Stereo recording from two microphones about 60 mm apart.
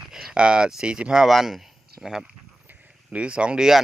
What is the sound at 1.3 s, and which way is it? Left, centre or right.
Speech, centre.